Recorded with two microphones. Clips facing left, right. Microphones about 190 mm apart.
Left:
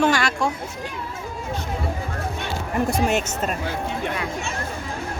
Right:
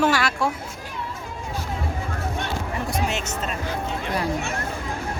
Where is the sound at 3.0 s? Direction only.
50° left (ahead or behind).